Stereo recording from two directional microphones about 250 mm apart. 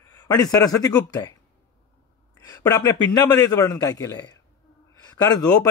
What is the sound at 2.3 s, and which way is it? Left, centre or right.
A woman's voice, centre.